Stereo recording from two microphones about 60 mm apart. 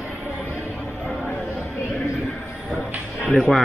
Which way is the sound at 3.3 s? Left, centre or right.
Centre.